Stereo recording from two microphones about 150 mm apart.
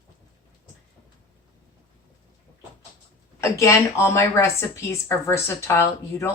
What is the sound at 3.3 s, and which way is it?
A woman's voice, 20° left (ahead or behind).